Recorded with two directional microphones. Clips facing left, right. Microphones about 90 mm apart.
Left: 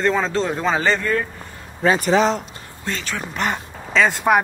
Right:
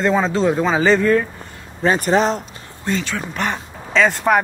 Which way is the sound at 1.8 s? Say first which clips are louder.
Even; 45° right (ahead or behind).